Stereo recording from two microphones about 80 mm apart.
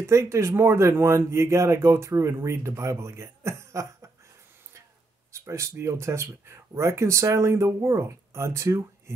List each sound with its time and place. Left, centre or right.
0.0 s speech: right
5.3 s speech: right